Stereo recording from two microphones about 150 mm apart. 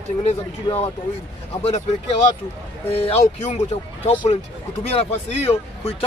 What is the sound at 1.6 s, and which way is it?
Speech, 45° left (ahead or behind).